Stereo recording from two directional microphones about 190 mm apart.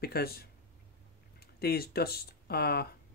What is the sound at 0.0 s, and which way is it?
Speech, 55° left (ahead or behind).